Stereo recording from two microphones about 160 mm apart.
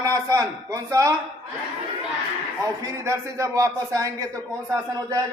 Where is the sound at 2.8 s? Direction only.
20° right (ahead or behind).